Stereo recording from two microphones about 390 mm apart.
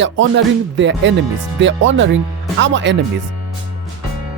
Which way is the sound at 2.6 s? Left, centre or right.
Right.